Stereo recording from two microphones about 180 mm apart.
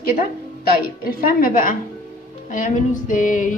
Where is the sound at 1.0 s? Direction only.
50° left (ahead or behind).